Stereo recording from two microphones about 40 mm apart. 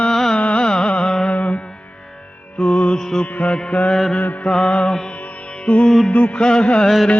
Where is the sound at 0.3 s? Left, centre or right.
Left.